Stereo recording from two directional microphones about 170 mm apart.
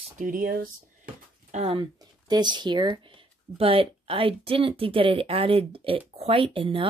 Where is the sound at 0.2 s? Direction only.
55° right (ahead or behind).